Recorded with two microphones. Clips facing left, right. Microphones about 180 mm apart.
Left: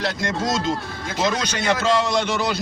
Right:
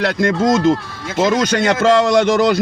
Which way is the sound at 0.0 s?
60° right (ahead or behind).